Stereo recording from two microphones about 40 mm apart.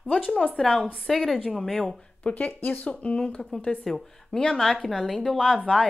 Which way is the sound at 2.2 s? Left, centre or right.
Left.